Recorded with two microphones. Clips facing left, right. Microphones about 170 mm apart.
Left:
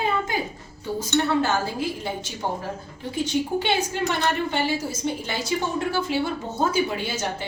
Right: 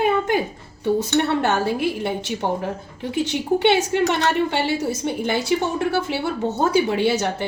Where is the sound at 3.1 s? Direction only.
70° right (ahead or behind).